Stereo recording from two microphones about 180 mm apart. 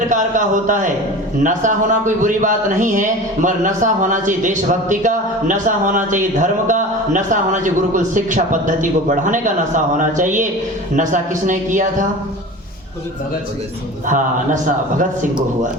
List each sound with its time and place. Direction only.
0.1 s speech: 45° right (ahead or behind)
14.1 s speech: 45° right (ahead or behind)